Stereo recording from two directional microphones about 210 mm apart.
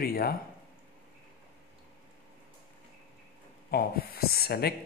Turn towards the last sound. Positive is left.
turn(degrees=45)  # may be behind; listen again after turning